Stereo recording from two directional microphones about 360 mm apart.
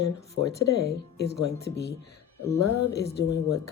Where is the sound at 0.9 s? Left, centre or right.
Left.